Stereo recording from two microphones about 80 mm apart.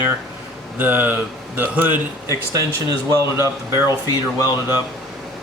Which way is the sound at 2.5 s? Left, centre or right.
Right.